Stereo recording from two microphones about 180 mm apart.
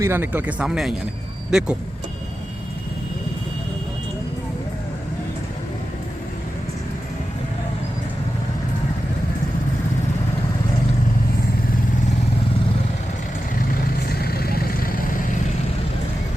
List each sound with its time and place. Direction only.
0.0 s speech: 10° right (ahead or behind)
13.6 s vehicle: 60° left (ahead or behind)